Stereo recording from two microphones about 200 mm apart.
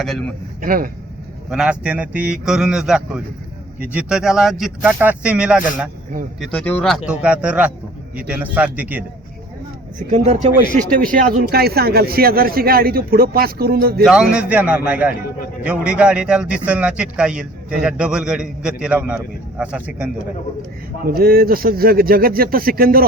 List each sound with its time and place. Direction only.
0.0 s a man's voice: centre (ahead or behind)
0.6 s speech: 45° right (ahead or behind)
1.5 s a man's voice: 5° right (ahead or behind)
6.4 s a man's voice: 5° left (ahead or behind)
10.1 s speech: 35° right (ahead or behind)
14.0 s a man's voice: 5° right (ahead or behind)
21.1 s speech: 50° right (ahead or behind)